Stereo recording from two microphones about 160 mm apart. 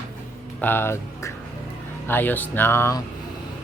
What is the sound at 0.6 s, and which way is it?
Speech, 15° left (ahead or behind).